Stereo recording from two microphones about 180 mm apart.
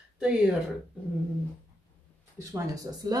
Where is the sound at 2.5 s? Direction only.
20° right (ahead or behind).